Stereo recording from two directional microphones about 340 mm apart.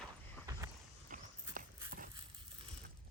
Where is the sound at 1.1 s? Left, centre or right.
Right.